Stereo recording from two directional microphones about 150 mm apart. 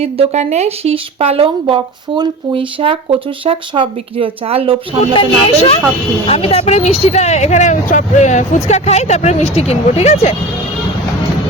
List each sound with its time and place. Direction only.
0.0 s speech: 45° right (ahead or behind)
5.1 s speech: 40° left (ahead or behind)